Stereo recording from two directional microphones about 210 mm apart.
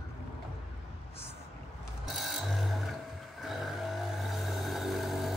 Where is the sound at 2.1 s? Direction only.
Centre (ahead or behind).